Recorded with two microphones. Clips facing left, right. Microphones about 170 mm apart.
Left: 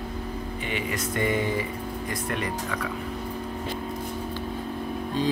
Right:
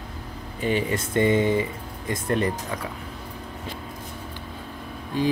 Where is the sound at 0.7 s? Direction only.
35° right (ahead or behind).